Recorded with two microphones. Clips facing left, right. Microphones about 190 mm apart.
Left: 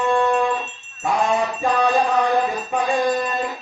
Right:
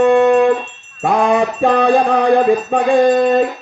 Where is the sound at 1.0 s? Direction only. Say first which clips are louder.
Right 6 dB; 60° right (ahead or behind).